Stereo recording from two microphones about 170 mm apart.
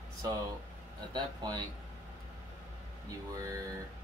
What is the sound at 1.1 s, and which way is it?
Speech, 25° right (ahead or behind).